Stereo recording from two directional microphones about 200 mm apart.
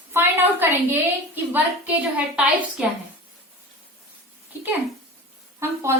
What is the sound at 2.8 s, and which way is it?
Speech, 5° right (ahead or behind).